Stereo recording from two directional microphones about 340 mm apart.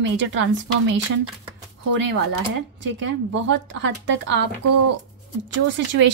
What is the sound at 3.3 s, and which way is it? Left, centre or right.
Speech, right.